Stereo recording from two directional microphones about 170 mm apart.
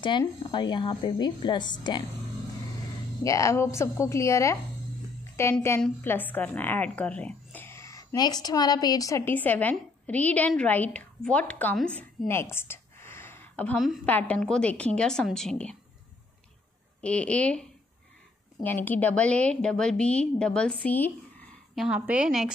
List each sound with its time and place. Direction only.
0.2 s a woman's voice: 25° left (ahead or behind)
3.3 s a woman's voice: 20° left (ahead or behind)
12.3 s a sound: 15° left (ahead or behind)
14.0 s a woman's voice: 10° left (ahead or behind)
17.0 s a woman's voice: 5° left (ahead or behind)
21.7 s a woman's voice: 5° right (ahead or behind)